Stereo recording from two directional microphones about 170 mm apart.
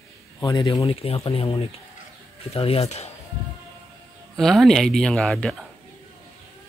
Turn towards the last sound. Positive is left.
turn(degrees=0)  # may be behind; listen again after turning